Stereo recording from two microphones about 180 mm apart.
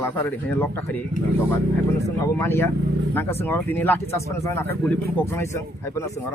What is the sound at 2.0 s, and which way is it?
Speech, 15° left (ahead or behind).